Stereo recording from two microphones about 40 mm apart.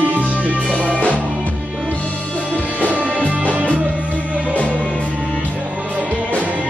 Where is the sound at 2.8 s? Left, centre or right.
Right.